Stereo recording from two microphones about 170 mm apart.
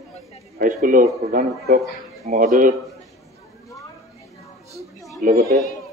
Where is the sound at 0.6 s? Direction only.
55° right (ahead or behind).